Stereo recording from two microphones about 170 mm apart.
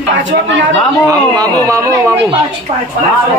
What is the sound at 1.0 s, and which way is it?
Speech, 20° right (ahead or behind).